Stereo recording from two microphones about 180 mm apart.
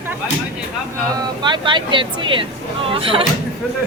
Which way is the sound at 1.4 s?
25° right (ahead or behind).